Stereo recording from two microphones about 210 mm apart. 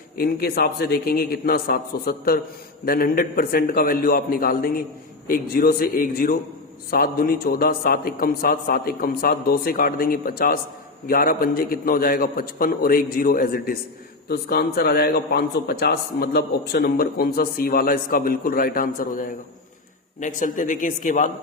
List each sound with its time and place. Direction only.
0.2 s a man's voice: 45° left (ahead or behind)